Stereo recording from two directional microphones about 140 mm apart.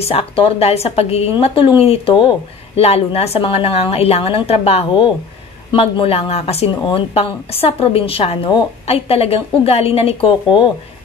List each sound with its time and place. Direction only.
0.0 s a woman's voice: 40° left (ahead or behind)